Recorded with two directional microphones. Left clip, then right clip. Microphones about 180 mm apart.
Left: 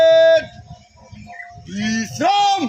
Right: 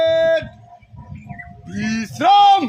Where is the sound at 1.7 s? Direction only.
45° left (ahead or behind).